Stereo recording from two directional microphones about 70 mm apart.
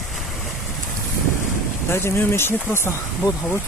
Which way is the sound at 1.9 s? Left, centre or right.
Left.